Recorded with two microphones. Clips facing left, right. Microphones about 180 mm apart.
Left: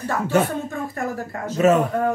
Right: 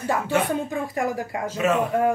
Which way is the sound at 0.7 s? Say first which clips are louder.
Right 1 dB; 15° right (ahead or behind).